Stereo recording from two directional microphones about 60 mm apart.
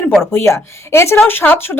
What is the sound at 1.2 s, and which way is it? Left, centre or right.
Speech, left.